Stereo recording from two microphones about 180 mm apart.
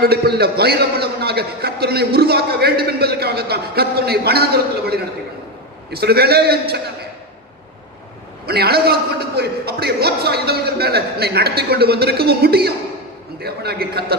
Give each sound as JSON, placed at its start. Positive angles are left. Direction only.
{"t": 0.0, "sound": "a man's voice", "side_deg": -60}
{"t": 8.4, "sound": "a man's voice", "side_deg": -60}